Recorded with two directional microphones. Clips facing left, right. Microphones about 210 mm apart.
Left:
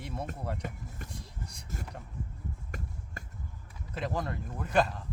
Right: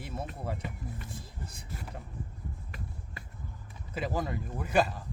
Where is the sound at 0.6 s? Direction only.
45° left (ahead or behind).